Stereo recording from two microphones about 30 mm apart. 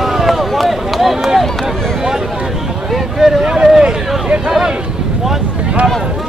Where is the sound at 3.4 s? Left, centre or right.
Right.